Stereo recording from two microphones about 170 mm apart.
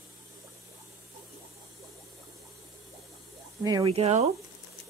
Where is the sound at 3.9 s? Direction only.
35° right (ahead or behind).